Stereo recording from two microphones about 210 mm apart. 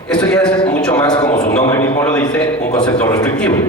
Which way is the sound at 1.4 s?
35° left (ahead or behind).